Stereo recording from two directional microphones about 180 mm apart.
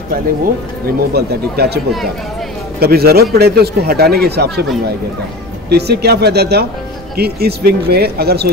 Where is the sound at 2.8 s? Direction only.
60° right (ahead or behind).